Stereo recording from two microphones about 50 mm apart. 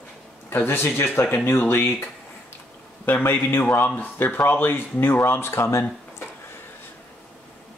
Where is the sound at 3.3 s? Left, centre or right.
Left.